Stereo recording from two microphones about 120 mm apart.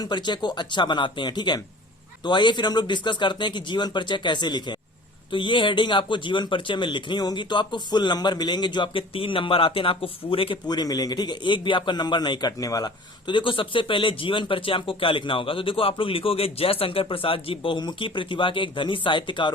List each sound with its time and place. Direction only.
0.0 s a man's voice: 40° left (ahead or behind)
10.7 s a man's voice: 35° left (ahead or behind)